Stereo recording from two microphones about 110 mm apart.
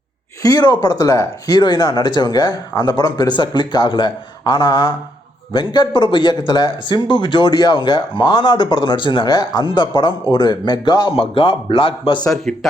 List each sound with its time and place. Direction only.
0.4 s speech: 40° left (ahead or behind)
11.1 s a man's voice: 55° left (ahead or behind)
12.2 s speech: 5° left (ahead or behind)